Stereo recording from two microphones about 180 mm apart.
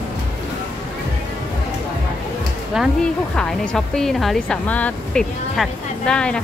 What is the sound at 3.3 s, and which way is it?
Speech, 5° left (ahead or behind).